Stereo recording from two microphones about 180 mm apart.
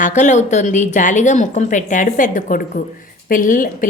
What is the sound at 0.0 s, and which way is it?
A woman's voice, 45° left (ahead or behind).